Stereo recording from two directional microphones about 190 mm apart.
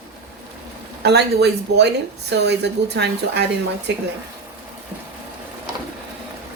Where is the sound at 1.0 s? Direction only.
60° right (ahead or behind).